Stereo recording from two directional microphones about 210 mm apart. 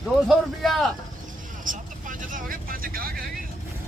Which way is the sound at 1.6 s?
40° right (ahead or behind).